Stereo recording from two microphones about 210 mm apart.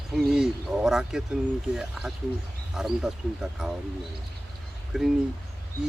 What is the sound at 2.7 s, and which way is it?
Speech, centre (ahead or behind).